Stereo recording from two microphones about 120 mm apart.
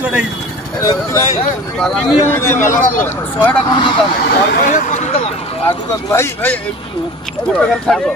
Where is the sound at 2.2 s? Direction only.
20° left (ahead or behind).